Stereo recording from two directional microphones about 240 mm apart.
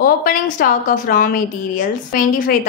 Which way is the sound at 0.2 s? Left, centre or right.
Left.